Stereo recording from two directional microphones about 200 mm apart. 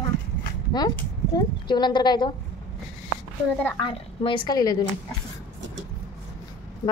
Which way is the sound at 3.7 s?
25° left (ahead or behind).